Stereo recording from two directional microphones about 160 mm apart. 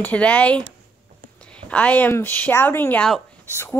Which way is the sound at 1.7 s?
10° left (ahead or behind).